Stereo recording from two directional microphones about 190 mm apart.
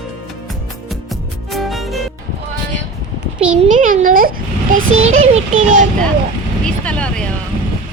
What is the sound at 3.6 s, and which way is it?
Speech, 45° right (ahead or behind).